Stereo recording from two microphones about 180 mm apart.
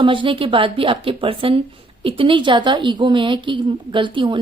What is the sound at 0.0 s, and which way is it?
A woman's voice, 30° right (ahead or behind).